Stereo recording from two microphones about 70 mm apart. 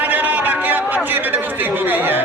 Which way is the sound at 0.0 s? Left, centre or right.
Right.